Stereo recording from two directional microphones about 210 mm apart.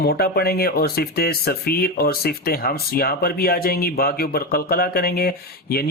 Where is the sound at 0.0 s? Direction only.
50° left (ahead or behind).